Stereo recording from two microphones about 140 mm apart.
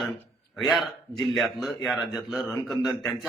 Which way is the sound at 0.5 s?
Centre (ahead or behind).